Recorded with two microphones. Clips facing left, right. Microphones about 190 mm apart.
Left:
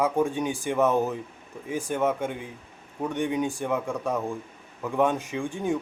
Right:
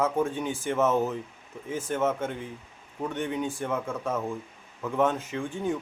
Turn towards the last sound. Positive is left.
turn(degrees=15)  # may be behind; listen again after turning